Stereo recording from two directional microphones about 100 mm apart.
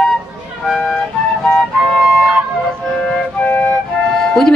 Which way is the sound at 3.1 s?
15° left (ahead or behind).